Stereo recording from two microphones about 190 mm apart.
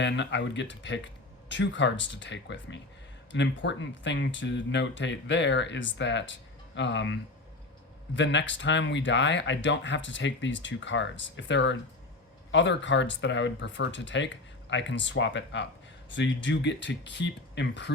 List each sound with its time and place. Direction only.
0.0 s speech: 70° left (ahead or behind)